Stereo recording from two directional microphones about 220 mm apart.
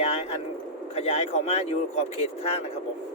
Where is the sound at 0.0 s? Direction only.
30° left (ahead or behind).